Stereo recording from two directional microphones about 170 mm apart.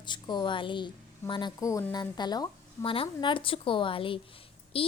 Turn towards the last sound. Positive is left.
turn(degrees=35)  # may be behind; listen again after turning